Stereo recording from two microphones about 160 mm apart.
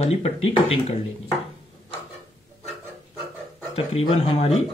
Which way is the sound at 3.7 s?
35° left (ahead or behind).